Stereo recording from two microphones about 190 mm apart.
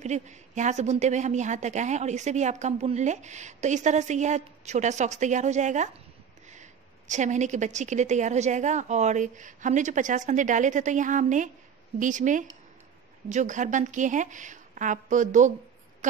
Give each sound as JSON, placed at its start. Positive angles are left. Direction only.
{"t": 0.0, "sound": "a woman's voice", "side_deg": -40}